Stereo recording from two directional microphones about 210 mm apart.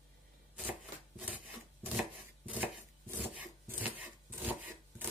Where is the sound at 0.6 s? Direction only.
5° right (ahead or behind).